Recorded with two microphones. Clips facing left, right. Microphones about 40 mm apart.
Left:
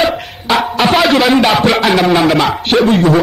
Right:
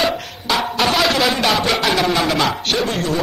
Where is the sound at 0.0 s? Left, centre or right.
Centre.